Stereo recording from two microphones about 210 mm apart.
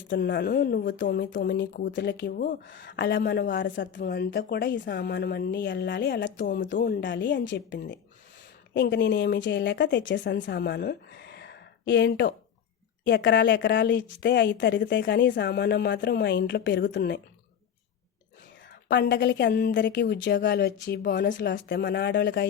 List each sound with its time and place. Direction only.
0.1 s a woman's voice: 50° left (ahead or behind)
2.6 s a woman's voice: 60° left (ahead or behind)
6.7 s a woman's voice: 45° left (ahead or behind)
18.7 s a woman's voice: 55° left (ahead or behind)
21.3 s speech: 55° left (ahead or behind)